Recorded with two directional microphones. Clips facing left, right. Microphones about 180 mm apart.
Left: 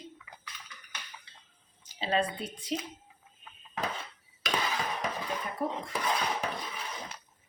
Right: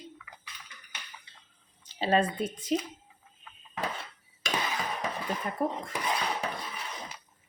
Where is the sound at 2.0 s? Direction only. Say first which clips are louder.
Right 4 dB; 45° right (ahead or behind).